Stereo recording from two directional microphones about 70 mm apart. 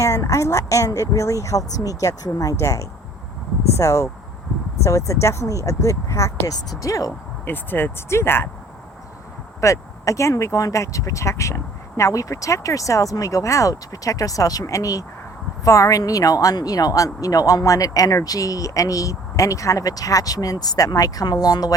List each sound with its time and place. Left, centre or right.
0.0 s speech: left
7.4 s speech: left
9.6 s speech: left